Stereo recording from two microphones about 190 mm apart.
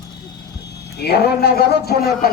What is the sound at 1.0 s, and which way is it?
A man's voice, 60° left (ahead or behind).